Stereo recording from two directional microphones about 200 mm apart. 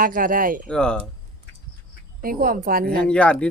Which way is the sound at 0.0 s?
45° right (ahead or behind).